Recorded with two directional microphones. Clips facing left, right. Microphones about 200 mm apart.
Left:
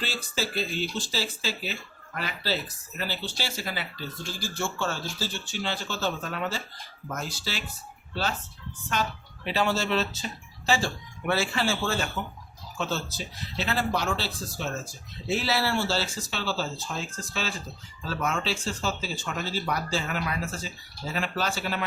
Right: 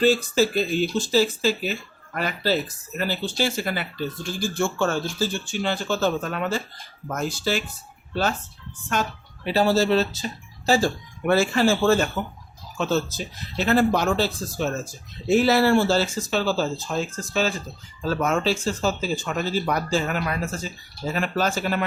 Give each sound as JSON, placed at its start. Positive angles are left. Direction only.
{"t": 0.0, "sound": "speech", "side_deg": -45}